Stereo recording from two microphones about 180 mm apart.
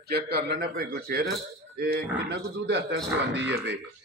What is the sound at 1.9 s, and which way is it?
Speech, 70° right (ahead or behind).